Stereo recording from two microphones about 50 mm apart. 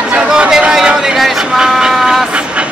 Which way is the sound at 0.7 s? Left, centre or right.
Centre.